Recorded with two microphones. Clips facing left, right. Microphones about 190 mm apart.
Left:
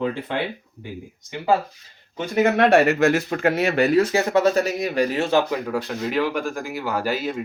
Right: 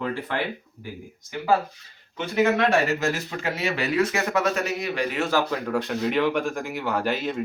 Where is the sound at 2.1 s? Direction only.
40° left (ahead or behind).